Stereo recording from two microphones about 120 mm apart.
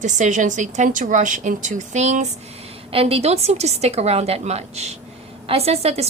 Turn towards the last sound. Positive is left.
turn(degrees=-60)  # may be behind; listen again after turning